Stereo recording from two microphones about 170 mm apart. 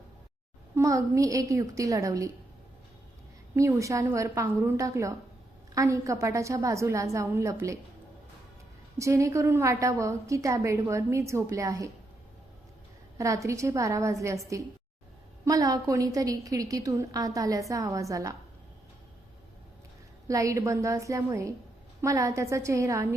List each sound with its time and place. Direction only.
0.8 s a woman's voice: 20° right (ahead or behind)
3.5 s a woman's voice: 20° right (ahead or behind)
9.0 s a woman's voice: 20° right (ahead or behind)
13.1 s a woman's voice: 20° right (ahead or behind)
20.2 s a woman's voice: 20° right (ahead or behind)